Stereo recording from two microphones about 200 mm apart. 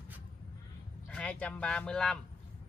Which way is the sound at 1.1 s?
5° left (ahead or behind).